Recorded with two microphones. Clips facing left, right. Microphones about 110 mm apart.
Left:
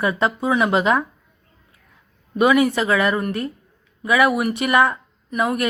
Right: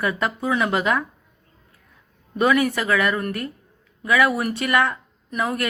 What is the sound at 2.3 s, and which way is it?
A woman's voice, 15° left (ahead or behind).